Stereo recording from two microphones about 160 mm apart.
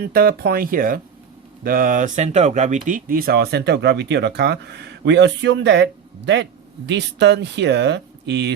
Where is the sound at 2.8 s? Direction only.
60° right (ahead or behind).